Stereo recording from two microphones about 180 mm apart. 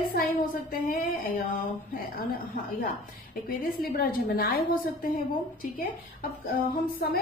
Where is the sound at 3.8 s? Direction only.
55° left (ahead or behind).